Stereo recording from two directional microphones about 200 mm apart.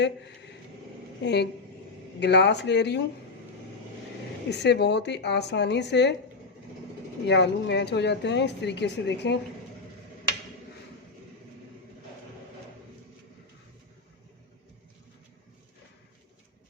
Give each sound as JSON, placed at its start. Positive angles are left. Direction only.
{"t": 1.2, "sound": "speech", "side_deg": 55}
{"t": 4.4, "sound": "speech", "side_deg": 55}
{"t": 7.3, "sound": "speech", "side_deg": 60}